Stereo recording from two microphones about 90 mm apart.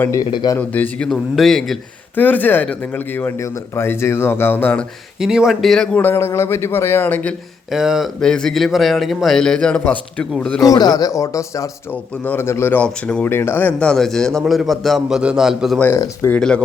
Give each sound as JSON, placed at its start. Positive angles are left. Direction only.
{"t": 0.6, "sound": "a man's voice", "side_deg": 15}
{"t": 2.1, "sound": "a man's voice", "side_deg": 20}
{"t": 3.3, "sound": "a man's voice", "side_deg": 35}
{"t": 5.2, "sound": "a man's voice", "side_deg": -5}
{"t": 6.0, "sound": "a man's voice", "side_deg": 25}
{"t": 7.7, "sound": "a man's voice", "side_deg": -5}
{"t": 8.2, "sound": "a man's voice", "side_deg": 10}
{"t": 10.6, "sound": "speech", "side_deg": 45}
{"t": 11.9, "sound": "a man's voice", "side_deg": 20}
{"t": 12.8, "sound": "speech", "side_deg": 10}
{"t": 13.3, "sound": "a man's voice", "side_deg": 25}
{"t": 16.2, "sound": "speech", "side_deg": 30}